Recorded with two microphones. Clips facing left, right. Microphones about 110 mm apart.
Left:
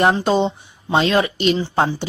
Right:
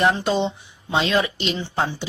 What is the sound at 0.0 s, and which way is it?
A woman's voice, 40° left (ahead or behind).